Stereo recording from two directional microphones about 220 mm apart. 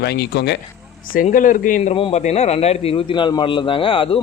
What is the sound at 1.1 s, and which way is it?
A man's voice, 35° left (ahead or behind).